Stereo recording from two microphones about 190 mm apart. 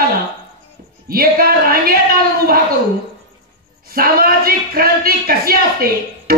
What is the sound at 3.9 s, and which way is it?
A woman's voice, 50° right (ahead or behind).